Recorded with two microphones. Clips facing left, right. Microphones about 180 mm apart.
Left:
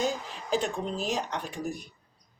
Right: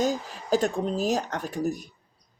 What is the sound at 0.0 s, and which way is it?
Speech, 40° right (ahead or behind).